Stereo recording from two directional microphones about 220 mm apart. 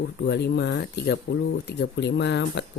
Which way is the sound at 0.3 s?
50° left (ahead or behind).